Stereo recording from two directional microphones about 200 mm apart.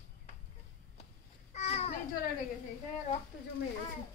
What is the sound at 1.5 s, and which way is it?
Children playing, 30° left (ahead or behind).